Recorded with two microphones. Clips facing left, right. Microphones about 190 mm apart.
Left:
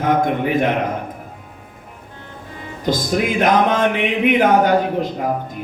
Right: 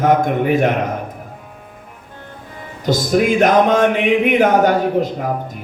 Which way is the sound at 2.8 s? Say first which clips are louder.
Right 4 dB; 45° right (ahead or behind).